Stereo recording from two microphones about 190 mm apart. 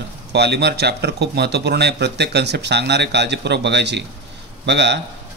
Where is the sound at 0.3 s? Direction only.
60° right (ahead or behind).